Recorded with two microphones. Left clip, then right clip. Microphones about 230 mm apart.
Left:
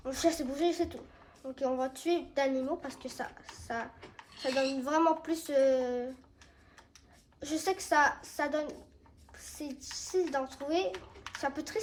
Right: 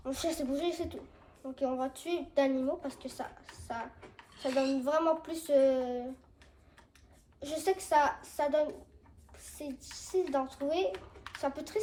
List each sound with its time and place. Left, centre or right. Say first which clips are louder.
0.0 s a woman's voice: left 4 dB; left
7.3 s a woman's voice: right 1 dB; left